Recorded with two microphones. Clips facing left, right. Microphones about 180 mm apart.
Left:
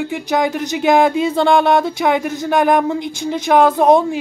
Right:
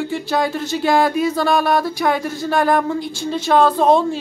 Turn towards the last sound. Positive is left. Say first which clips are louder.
# left 2 dB
turn(degrees=15)  # may be behind; listen again after turning